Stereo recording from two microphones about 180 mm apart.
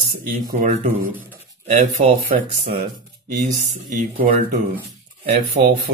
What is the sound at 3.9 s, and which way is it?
Speech, 40° right (ahead or behind).